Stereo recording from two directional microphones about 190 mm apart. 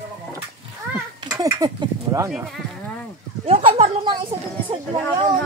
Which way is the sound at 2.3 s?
5° right (ahead or behind).